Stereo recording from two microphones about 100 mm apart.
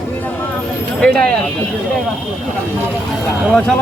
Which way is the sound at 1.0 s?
10° left (ahead or behind).